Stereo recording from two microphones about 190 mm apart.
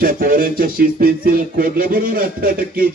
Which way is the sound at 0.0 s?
50° right (ahead or behind).